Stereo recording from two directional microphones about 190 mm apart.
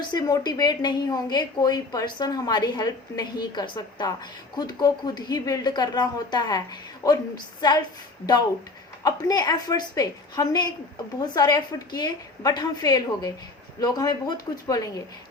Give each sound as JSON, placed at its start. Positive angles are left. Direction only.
{"t": 0.0, "sound": "a woman's voice", "side_deg": 20}
{"t": 9.0, "sound": "a woman's voice", "side_deg": 20}